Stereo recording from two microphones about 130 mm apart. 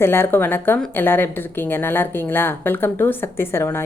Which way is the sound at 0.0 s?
15° left (ahead or behind).